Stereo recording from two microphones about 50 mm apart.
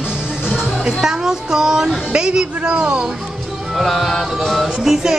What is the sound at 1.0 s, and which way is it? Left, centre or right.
A woman's voice, centre.